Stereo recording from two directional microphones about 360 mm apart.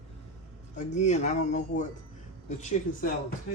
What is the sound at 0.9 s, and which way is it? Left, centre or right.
Speech, centre.